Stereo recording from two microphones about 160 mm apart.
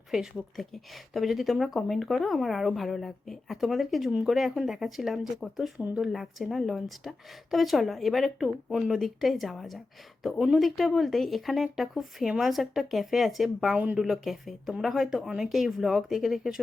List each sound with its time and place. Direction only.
0.1 s speech: centre (ahead or behind)